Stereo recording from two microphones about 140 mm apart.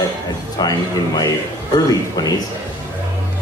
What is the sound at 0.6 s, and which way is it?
Speech, 30° left (ahead or behind).